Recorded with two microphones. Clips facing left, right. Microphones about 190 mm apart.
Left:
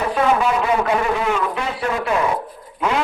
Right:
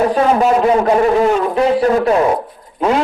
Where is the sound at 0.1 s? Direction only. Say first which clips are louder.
Right 5 dB; 35° right (ahead or behind).